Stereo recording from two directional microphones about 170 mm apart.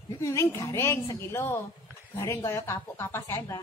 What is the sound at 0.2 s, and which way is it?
Speech, 15° left (ahead or behind).